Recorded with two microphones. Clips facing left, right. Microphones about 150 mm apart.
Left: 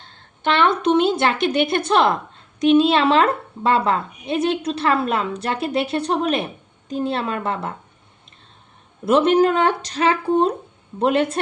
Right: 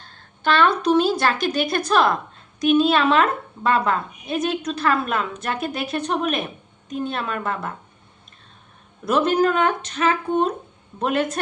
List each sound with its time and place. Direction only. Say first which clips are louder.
0.0 s a woman's voice: left 1 dB; 20° left (ahead or behind)
9.0 s a woman's voice: left 4 dB; 25° left (ahead or behind)